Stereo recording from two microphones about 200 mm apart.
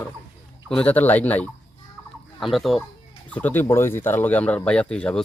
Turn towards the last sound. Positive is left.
turn(degrees=5)  # may be behind; listen again after turning